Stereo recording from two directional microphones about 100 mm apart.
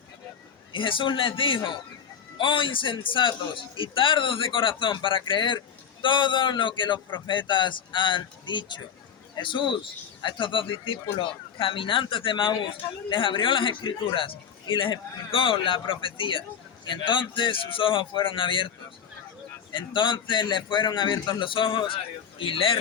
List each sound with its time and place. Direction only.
0.7 s a man's voice: 60° left (ahead or behind)
19.7 s a man's voice: 55° left (ahead or behind)